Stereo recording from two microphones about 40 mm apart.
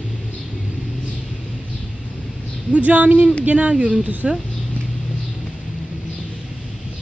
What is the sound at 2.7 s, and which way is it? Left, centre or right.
Speech, right.